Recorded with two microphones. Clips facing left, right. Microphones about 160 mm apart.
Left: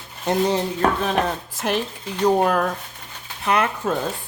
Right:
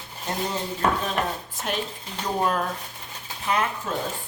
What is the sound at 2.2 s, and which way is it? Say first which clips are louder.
Speech: left 7 dB; 70° left (ahead or behind).